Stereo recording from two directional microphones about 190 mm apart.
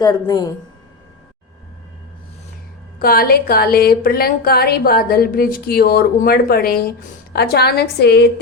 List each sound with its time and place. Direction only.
0.0 s a woman's voice: 20° left (ahead or behind)
3.0 s a woman's voice: 50° left (ahead or behind)